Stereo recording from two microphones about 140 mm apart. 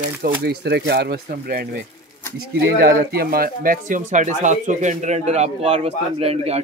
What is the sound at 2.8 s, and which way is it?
Speech, 90° right.